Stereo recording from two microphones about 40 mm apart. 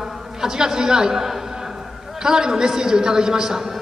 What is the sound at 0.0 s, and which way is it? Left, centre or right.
A man's voice, centre.